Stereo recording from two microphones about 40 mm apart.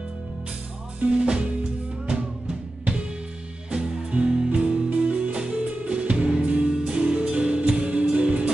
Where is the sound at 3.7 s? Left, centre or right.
Right.